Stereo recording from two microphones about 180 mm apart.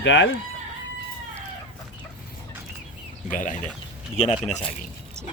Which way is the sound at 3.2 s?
45° left (ahead or behind).